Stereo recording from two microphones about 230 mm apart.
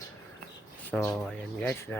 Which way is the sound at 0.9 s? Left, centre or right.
Centre.